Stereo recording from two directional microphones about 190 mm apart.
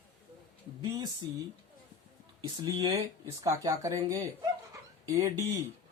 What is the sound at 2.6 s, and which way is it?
Speech, 25° right (ahead or behind).